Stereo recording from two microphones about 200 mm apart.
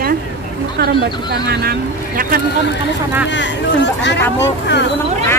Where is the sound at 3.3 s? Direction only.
65° left (ahead or behind).